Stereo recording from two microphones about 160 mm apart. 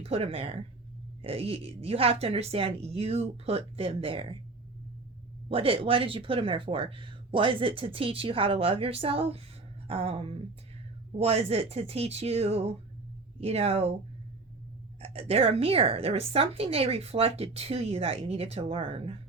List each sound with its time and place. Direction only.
0.0 s a woman's voice: 40° right (ahead or behind)
5.5 s a woman's voice: 35° right (ahead or behind)
15.0 s a woman's voice: 35° right (ahead or behind)